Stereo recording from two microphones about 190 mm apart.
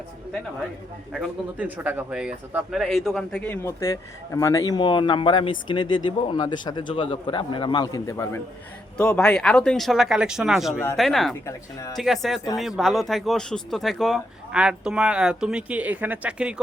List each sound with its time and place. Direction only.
1.1 s speech: 5° right (ahead or behind)
11.4 s speech: 15° left (ahead or behind)
11.9 s speech: centre (ahead or behind)